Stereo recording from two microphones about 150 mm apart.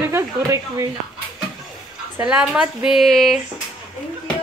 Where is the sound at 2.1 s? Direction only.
5° right (ahead or behind).